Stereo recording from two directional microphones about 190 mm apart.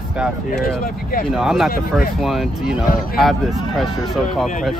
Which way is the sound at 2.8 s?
50° left (ahead or behind).